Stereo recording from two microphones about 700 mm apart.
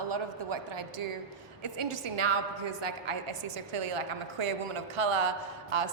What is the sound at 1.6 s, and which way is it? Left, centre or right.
A man's voice, right.